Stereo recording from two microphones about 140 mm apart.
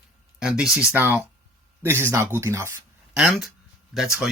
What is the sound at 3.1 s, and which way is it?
Speech, 5° right (ahead or behind).